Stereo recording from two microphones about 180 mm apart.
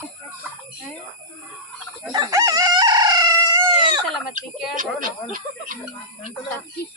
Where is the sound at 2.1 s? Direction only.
20° right (ahead or behind).